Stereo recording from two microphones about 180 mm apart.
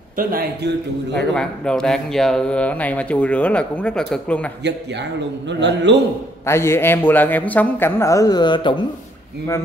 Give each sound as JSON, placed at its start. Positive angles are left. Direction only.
{"t": 0.2, "sound": "a man's voice", "side_deg": -55}
{"t": 1.1, "sound": "speech", "side_deg": 5}
{"t": 5.5, "sound": "a man's voice", "side_deg": -75}
{"t": 6.4, "sound": "speech", "side_deg": 15}